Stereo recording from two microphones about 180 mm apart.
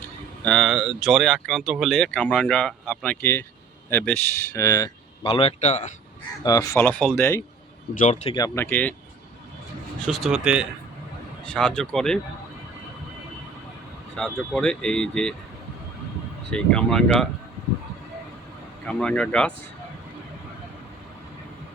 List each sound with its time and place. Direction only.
0.4 s speech: 5° left (ahead or behind)
5.2 s a man's voice: 30° left (ahead or behind)
6.4 s speech: 20° left (ahead or behind)
8.0 s a man's voice: 40° left (ahead or behind)
8.3 s speech: 20° left (ahead or behind)
10.1 s speech: centre (ahead or behind)
11.4 s speech: 5° left (ahead or behind)
14.2 s speech: 5° left (ahead or behind)
16.5 s speech: 5° left (ahead or behind)
18.9 s speech: 5° left (ahead or behind)